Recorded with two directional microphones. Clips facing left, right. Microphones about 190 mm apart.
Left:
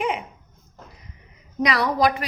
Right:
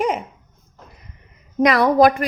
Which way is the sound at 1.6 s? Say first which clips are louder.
Right 7 dB; 50° right (ahead or behind).